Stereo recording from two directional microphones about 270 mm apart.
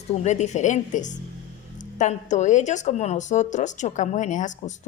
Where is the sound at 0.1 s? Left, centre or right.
Left.